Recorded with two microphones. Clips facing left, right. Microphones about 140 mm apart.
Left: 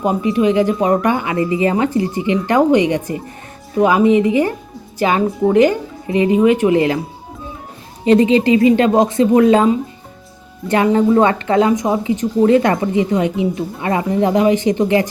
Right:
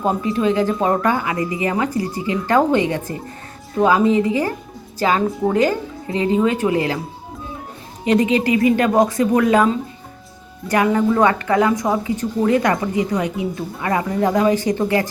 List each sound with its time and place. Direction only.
0.0 s a woman's voice: 15° left (ahead or behind)
8.0 s a woman's voice: 30° left (ahead or behind)
10.7 s a woman's voice: 25° left (ahead or behind)